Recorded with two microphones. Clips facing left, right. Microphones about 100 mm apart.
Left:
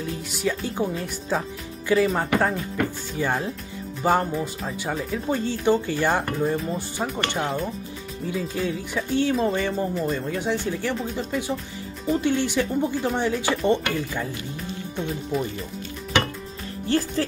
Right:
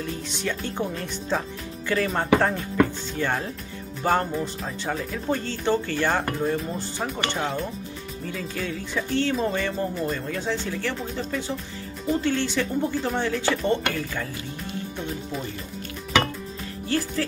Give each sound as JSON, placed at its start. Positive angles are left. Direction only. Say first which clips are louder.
{"t": 0.0, "sound": "speech", "louder": "left 3 dB", "side_deg": 5}
{"t": 6.5, "sound": "speech", "louder": "left 1 dB", "side_deg": 0}
{"t": 16.8, "sound": "speech", "louder": "left 3 dB", "side_deg": 30}